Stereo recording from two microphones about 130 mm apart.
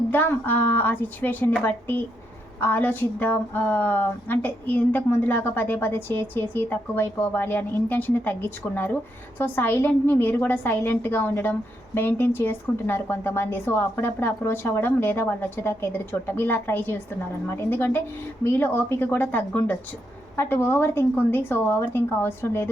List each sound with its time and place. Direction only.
0.1 s speech: 15° left (ahead or behind)